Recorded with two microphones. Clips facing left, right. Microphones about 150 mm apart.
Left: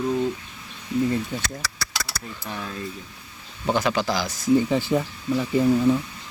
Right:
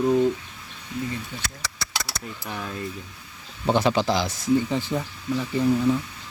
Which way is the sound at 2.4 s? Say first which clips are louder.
Even; 5° right (ahead or behind).